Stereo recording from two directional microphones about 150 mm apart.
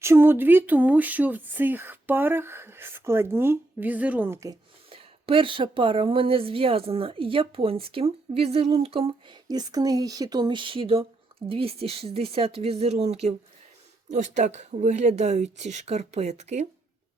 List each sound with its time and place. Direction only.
0.0 s speech: 15° right (ahead or behind)
4.9 s speech: 40° right (ahead or behind)